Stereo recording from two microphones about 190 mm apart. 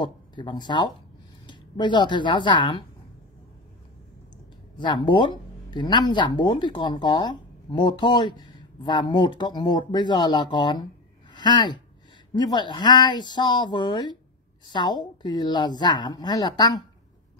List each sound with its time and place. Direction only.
0.0 s speech: 25° left (ahead or behind)
4.7 s speech: 25° left (ahead or behind)